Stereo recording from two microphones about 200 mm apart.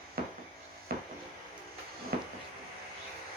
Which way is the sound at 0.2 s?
50° right (ahead or behind).